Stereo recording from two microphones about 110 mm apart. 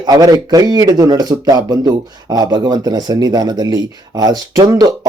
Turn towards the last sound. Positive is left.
turn(degrees=-35)  # may be behind; listen again after turning